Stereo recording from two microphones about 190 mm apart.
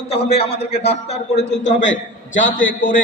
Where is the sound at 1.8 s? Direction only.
85° left.